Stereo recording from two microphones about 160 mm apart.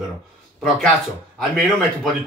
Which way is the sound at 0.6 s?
Centre (ahead or behind).